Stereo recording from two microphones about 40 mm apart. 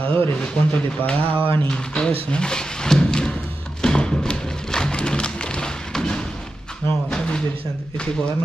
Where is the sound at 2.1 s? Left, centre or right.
Left.